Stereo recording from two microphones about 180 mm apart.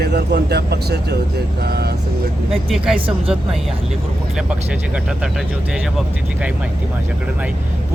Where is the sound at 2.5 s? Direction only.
Centre (ahead or behind).